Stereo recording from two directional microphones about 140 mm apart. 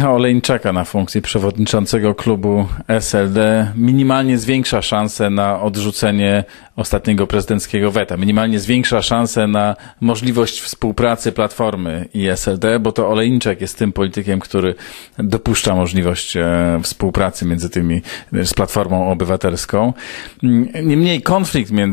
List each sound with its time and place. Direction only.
0.0 s speech: 20° left (ahead or behind)
3.0 s speech: 15° left (ahead or behind)
18.4 s speech: 15° left (ahead or behind)
18.8 s speech: 25° left (ahead or behind)
20.9 s speech: 15° left (ahead or behind)